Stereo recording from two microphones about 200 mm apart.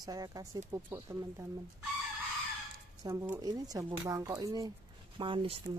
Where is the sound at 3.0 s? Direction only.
15° right (ahead or behind).